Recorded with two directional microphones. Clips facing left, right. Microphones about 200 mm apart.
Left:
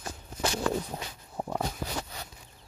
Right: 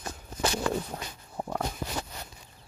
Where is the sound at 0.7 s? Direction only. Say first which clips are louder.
Even; 5° left (ahead or behind).